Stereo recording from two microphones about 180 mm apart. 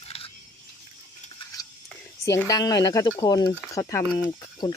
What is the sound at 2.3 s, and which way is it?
Speech, 20° left (ahead or behind).